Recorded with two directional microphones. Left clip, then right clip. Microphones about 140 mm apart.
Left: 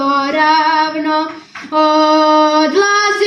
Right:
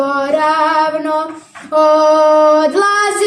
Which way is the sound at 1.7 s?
45° right (ahead or behind).